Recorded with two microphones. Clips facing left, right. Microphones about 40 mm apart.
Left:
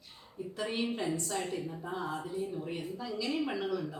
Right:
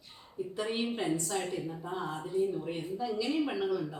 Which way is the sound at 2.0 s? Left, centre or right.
Right.